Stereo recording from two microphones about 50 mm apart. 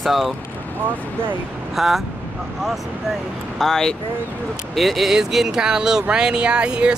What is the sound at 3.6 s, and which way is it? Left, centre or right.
Speech, centre.